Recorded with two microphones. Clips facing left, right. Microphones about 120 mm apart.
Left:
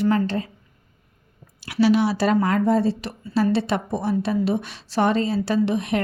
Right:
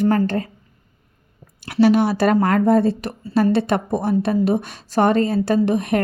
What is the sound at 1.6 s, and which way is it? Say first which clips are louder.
A woman's voice: right 3 dB; 50° right (ahead or behind).